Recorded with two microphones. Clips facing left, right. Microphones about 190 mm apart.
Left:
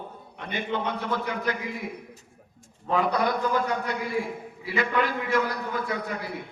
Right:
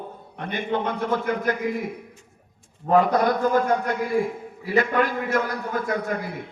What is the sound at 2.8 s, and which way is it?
A man's voice, 45° right (ahead or behind).